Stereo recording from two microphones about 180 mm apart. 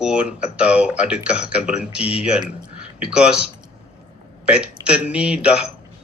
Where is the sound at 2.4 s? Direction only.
25° right (ahead or behind).